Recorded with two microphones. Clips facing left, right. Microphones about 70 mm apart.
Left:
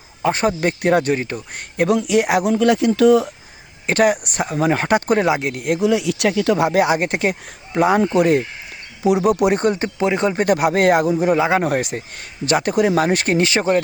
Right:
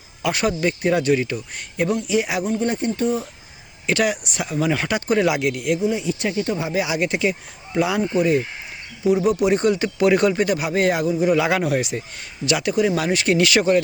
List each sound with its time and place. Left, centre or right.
0.2 s speech: left
0.6 s speech: left
3.8 s speech: left
5.2 s speech: left
5.8 s speech: left
8.1 s speech: left
10.0 s speech: left
10.3 s speech: left
11.3 s speech: left
11.6 s speech: left